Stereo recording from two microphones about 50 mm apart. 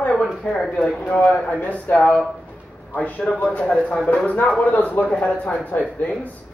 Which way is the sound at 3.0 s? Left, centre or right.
Left.